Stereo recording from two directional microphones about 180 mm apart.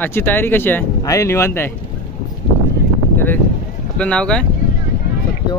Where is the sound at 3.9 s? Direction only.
5° left (ahead or behind).